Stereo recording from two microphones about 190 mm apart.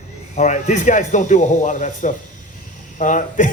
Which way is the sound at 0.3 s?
40° left (ahead or behind).